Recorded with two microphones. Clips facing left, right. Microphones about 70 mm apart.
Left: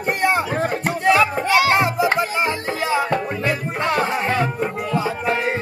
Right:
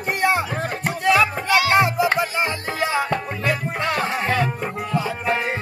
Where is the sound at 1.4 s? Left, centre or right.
Left.